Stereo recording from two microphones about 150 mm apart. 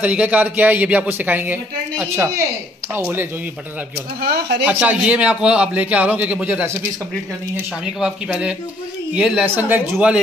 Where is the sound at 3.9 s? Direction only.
90° right.